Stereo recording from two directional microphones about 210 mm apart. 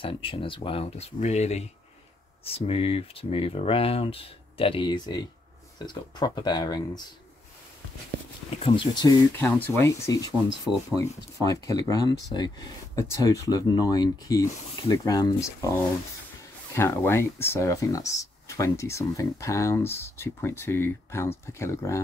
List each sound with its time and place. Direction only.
0.0 s speech: 25° left (ahead or behind)
8.5 s speech: 25° left (ahead or behind)
9.4 s speech: 10° left (ahead or behind)
10.7 s speech: centre (ahead or behind)
11.4 s speech: 15° left (ahead or behind)